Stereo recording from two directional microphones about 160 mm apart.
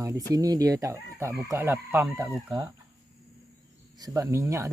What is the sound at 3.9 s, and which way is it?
Speech, 20° right (ahead or behind).